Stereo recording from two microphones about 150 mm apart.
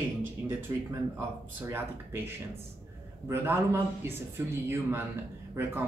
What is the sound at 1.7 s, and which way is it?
Speech, 15° right (ahead or behind).